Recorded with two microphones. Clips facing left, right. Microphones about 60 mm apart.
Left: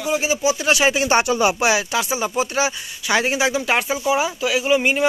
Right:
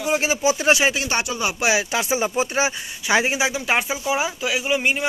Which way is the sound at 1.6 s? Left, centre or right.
Centre.